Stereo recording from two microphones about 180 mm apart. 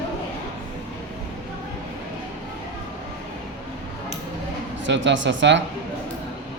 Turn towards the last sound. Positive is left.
turn(degrees=-90)